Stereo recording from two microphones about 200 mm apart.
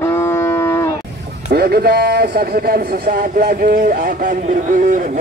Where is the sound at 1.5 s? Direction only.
55° right (ahead or behind).